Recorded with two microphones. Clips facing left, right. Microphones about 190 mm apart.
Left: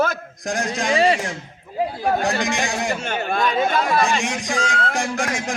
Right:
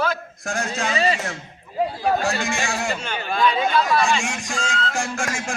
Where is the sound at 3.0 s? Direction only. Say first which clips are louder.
Left 1 dB; 50° left (ahead or behind).